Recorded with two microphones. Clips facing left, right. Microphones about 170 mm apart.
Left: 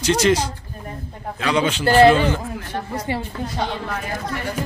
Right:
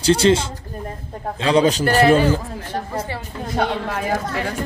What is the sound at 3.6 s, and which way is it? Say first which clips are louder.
Speech: right 6 dB; 70° right (ahead or behind).